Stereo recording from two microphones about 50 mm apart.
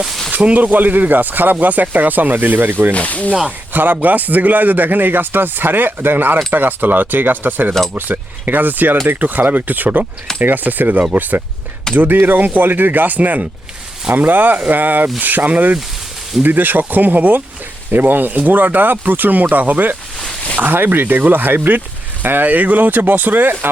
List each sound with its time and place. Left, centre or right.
0.3 s speech: right
2.9 s speech: left
3.7 s speech: right